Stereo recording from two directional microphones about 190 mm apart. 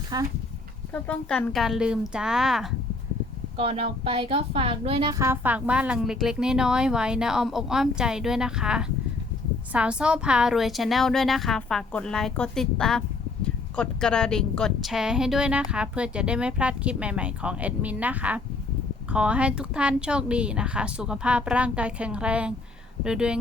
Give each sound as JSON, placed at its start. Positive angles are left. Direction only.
{"t": 0.1, "sound": "speech", "side_deg": -20}
{"t": 1.0, "sound": "speech", "side_deg": 5}
{"t": 3.6, "sound": "speech", "side_deg": -30}